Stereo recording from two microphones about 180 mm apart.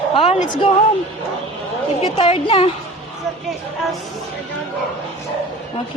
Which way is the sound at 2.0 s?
30° left (ahead or behind).